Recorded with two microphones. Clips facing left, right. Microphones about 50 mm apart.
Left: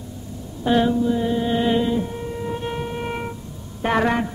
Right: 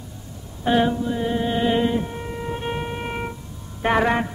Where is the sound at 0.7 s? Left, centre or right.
Centre.